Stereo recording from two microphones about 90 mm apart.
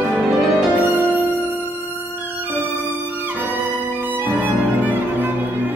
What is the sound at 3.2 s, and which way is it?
Music, 20° right (ahead or behind).